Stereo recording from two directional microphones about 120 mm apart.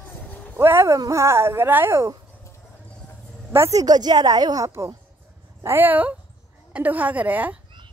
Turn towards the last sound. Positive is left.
turn(degrees=-15)  # may be behind; listen again after turning